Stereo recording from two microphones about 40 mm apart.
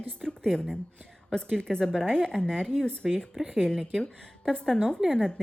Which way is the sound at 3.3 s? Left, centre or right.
Centre.